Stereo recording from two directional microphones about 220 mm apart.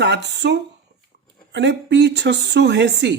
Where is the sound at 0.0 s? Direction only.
50° right (ahead or behind).